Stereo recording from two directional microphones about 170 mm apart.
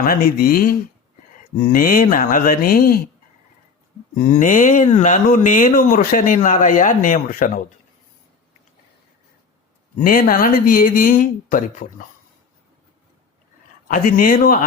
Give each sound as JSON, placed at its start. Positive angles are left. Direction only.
{"t": 0.0, "sound": "speech", "side_deg": 55}
{"t": 4.1, "sound": "speech", "side_deg": 50}
{"t": 10.0, "sound": "speech", "side_deg": 55}
{"t": 13.8, "sound": "speech", "side_deg": 50}